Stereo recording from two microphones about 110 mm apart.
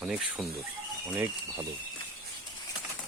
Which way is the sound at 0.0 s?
5° right (ahead or behind).